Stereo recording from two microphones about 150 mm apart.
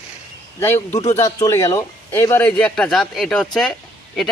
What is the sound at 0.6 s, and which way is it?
Speech, 15° left (ahead or behind).